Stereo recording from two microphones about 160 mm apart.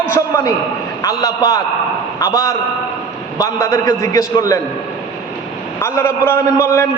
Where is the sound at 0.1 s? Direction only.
15° left (ahead or behind).